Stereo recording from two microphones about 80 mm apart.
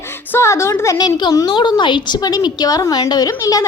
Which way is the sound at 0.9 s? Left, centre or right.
Left.